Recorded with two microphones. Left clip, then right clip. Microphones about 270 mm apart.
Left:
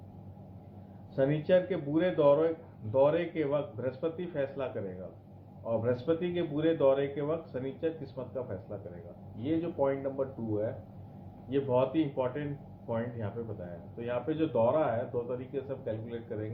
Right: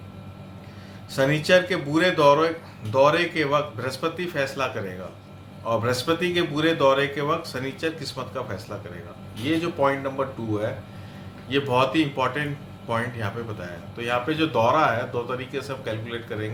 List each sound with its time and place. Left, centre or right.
1.1 s speech: centre
9.5 s speech: centre
11.4 s speech: centre